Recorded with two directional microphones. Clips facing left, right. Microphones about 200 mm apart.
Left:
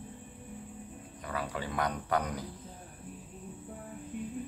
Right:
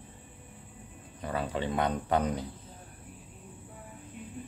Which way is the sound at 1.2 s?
25° right (ahead or behind).